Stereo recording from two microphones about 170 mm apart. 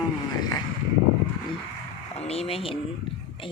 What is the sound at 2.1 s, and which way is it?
Speech, 35° left (ahead or behind).